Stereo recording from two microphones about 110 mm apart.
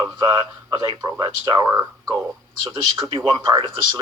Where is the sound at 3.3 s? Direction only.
40° right (ahead or behind).